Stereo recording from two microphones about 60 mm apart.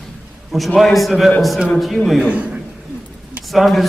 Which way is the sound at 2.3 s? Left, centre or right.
Right.